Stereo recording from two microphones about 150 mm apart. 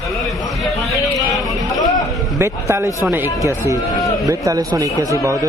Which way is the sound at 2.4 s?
20° right (ahead or behind).